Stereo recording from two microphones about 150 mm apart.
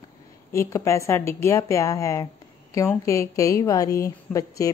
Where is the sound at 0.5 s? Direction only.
20° left (ahead or behind).